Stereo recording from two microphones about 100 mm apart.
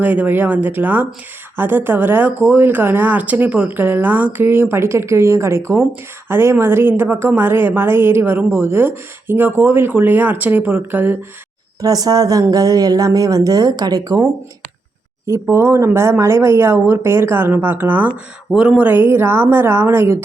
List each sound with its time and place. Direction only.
0.0 s a woman's voice: 15° right (ahead or behind)
11.8 s speech: 40° right (ahead or behind)
15.3 s a woman's voice: 25° right (ahead or behind)